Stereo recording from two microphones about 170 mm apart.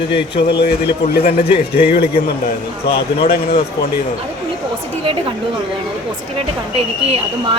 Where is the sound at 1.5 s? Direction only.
35° left (ahead or behind).